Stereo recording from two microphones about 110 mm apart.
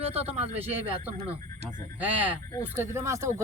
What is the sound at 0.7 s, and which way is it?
Speech, 15° right (ahead or behind).